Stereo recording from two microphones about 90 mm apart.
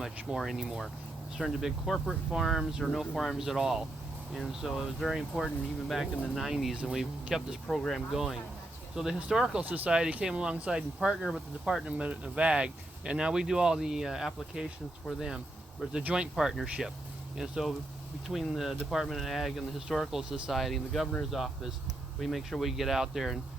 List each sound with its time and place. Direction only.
0.0 s speech: 5° right (ahead or behind)
9.6 s speech: 20° right (ahead or behind)
15.9 s speech: 10° right (ahead or behind)